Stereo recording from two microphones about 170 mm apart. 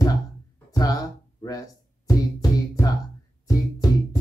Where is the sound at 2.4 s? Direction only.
20° left (ahead or behind).